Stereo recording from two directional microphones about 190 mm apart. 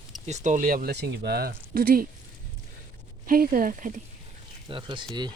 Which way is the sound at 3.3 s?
50° right (ahead or behind).